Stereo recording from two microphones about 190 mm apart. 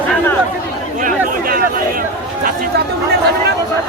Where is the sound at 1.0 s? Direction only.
50° right (ahead or behind).